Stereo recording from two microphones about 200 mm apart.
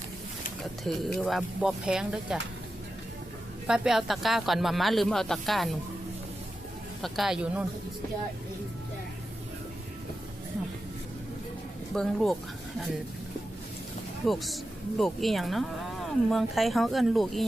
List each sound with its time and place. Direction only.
0.6 s speech: centre (ahead or behind)
3.7 s speech: centre (ahead or behind)
7.0 s speech: centre (ahead or behind)
11.9 s speech: centre (ahead or behind)
14.3 s speech: centre (ahead or behind)